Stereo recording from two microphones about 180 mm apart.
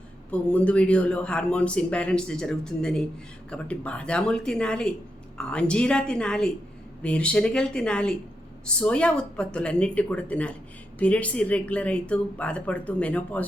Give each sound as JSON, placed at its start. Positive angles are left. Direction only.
{"t": 0.3, "sound": "a man's voice", "side_deg": 5}